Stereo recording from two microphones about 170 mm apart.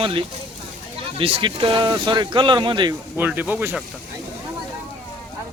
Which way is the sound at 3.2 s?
10° right (ahead or behind).